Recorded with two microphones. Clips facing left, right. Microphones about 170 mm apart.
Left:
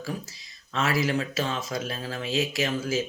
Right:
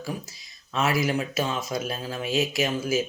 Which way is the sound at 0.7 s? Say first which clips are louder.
Right 1 dB; 20° right (ahead or behind).